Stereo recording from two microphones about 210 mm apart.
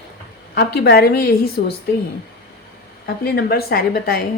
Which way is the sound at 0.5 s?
50° left (ahead or behind).